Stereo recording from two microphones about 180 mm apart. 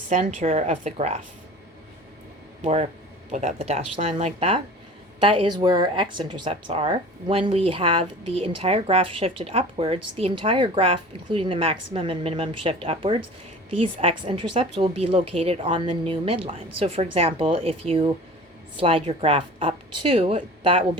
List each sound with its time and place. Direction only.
0.1 s speech: 40° right (ahead or behind)
2.6 s speech: 40° right (ahead or behind)